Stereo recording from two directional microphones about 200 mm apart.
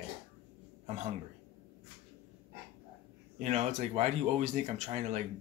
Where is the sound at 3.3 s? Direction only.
35° right (ahead or behind).